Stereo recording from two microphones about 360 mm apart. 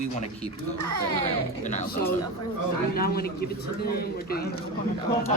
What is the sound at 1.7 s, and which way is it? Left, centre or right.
A man's voice, centre.